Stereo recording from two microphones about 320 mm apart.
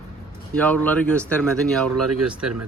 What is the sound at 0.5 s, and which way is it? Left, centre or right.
Speech, centre.